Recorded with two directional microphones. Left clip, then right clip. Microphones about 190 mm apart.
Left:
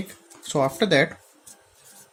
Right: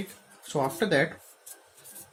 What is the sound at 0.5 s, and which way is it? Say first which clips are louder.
Speech: left 5 dB; 60° left (ahead or behind).